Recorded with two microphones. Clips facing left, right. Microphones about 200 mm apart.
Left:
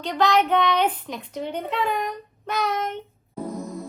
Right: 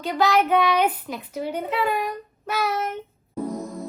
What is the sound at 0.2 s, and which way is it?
Child singing, 5° right (ahead or behind).